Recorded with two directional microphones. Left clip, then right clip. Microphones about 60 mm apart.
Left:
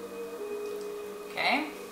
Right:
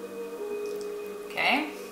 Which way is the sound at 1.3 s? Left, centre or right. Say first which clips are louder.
Right 3 dB; centre.